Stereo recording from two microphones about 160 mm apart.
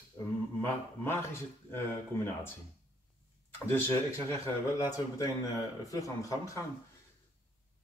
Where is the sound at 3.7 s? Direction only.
15° left (ahead or behind).